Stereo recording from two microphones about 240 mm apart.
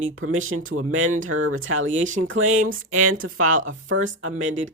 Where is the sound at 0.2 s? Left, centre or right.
Right.